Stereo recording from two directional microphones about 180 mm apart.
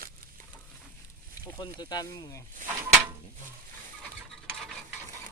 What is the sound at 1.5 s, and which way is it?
Speech, 25° left (ahead or behind).